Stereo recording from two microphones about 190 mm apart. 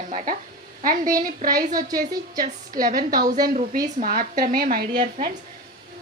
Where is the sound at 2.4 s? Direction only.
45° right (ahead or behind).